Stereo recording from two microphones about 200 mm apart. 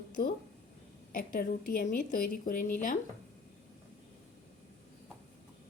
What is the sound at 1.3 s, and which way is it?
A woman's voice, 45° left (ahead or behind).